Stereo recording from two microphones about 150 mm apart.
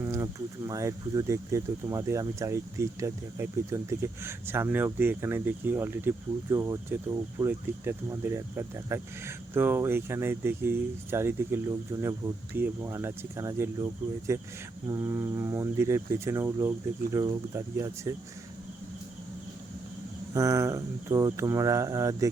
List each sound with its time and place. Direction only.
0.0 s a sound: 20° right (ahead or behind)
0.7 s speech: 20° right (ahead or behind)
20.3 s speech: 20° right (ahead or behind)